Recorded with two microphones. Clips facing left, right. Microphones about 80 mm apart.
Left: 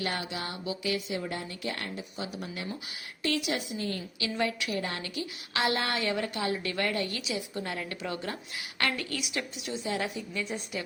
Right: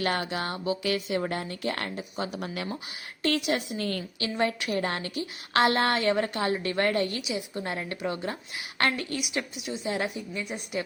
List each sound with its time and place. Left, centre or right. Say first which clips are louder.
0.0 s speech: right 5 dB; right
4.2 s speech: right 3 dB; right
6.5 s a woman's voice: right 5 dB; right